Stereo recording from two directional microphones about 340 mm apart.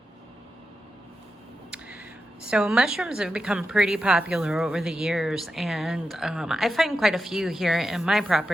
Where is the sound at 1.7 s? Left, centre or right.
Centre.